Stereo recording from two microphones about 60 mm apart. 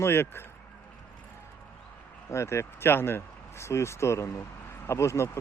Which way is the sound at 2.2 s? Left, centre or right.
Left.